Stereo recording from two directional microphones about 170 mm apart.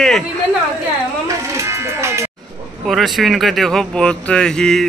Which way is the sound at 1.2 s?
20° right (ahead or behind).